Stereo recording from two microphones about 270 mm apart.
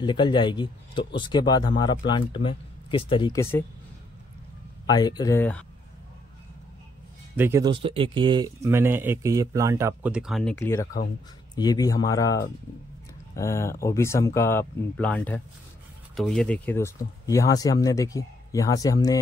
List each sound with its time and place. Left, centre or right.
0.0 s speech: centre
4.8 s speech: centre
7.3 s speech: centre